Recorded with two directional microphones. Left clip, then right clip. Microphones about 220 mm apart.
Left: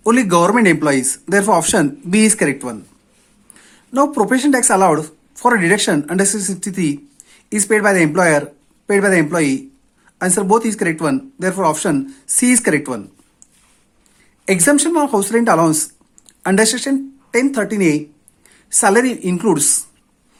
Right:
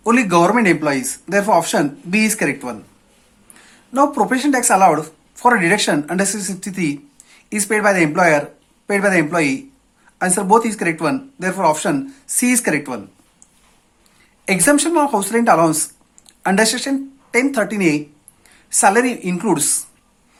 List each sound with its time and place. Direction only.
0.0 s speech: 30° left (ahead or behind)
14.4 s speech: 25° left (ahead or behind)